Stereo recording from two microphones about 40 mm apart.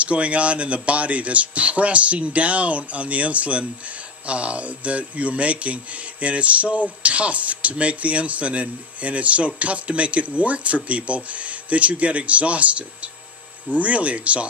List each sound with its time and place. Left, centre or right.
0.0 s speech: right